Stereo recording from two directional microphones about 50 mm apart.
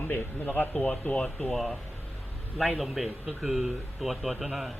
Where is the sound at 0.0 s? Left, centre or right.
Left.